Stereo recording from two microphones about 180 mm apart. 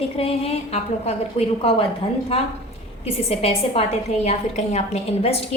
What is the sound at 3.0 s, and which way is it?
A woman's voice, 35° left (ahead or behind).